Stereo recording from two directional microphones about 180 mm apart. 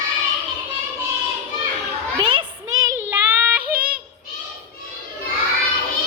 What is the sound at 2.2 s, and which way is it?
Child singing, 25° right (ahead or behind).